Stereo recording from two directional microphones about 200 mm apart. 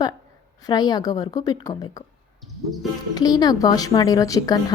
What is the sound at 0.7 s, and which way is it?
Speech, 20° left (ahead or behind).